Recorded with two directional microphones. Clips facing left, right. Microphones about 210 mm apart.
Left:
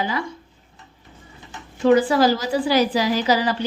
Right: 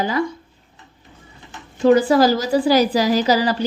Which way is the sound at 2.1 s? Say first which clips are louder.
Right 3 dB; 40° right (ahead or behind).